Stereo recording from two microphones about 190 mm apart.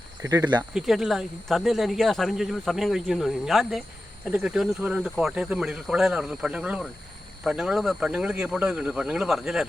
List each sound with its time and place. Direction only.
0.2 s speech: 20° right (ahead or behind)
0.7 s speech: centre (ahead or behind)